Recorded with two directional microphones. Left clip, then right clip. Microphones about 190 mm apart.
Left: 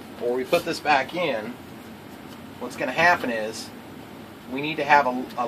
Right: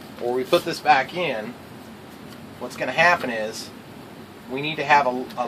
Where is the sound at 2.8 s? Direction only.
20° right (ahead or behind).